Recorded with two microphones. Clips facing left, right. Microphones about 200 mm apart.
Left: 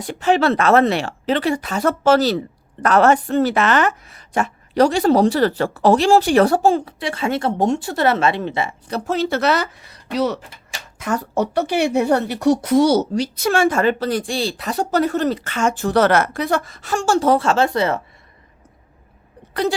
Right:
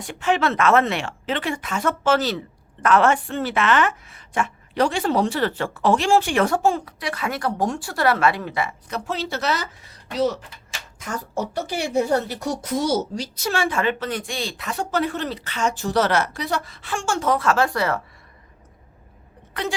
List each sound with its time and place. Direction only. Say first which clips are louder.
0.0 s a woman's voice: left 5 dB; 35° left (ahead or behind)
9.0 s a woman's voice: left 7 dB; 50° left (ahead or behind); by 18.0 s 20° left (ahead or behind)